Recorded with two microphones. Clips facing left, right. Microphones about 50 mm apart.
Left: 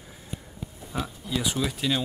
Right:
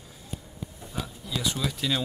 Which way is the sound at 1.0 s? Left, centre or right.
Centre.